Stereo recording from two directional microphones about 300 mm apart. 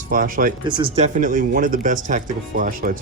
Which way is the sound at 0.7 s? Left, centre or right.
Centre.